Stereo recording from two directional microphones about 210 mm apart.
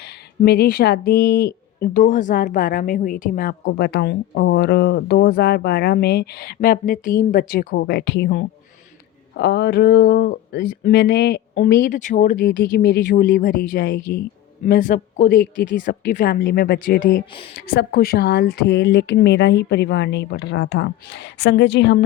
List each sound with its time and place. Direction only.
0.4 s a woman's voice: 50° left (ahead or behind)